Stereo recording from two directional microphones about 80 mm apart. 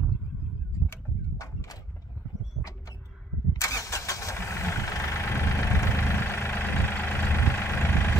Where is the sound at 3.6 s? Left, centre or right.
Left.